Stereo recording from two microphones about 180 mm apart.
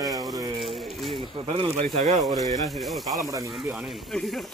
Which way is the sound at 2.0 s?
45° right (ahead or behind).